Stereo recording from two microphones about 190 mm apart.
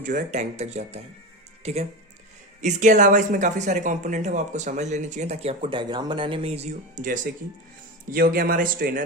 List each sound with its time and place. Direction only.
0.0 s speech: 45° right (ahead or behind)